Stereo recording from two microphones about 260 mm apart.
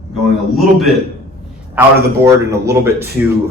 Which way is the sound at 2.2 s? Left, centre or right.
Centre.